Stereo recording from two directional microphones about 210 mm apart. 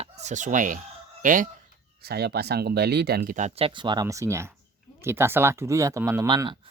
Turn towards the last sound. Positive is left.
turn(degrees=-20)  # may be behind; listen again after turning